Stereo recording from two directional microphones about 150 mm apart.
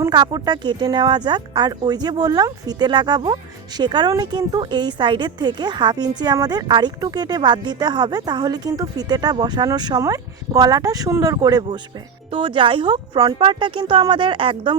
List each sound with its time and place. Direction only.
0.0 s speech: 25° right (ahead or behind)